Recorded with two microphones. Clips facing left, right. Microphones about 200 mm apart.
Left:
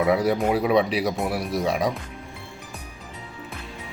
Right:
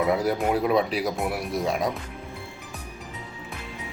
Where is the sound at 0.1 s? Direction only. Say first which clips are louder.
Left 2 dB; centre (ahead or behind).